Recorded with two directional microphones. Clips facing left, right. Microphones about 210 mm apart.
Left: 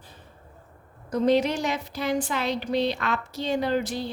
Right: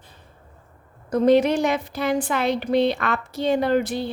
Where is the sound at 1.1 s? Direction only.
55° right (ahead or behind).